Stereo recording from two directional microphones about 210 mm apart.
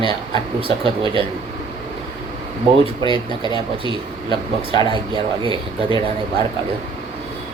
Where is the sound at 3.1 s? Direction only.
20° right (ahead or behind).